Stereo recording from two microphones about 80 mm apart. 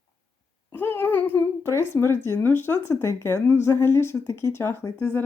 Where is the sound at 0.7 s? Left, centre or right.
Left.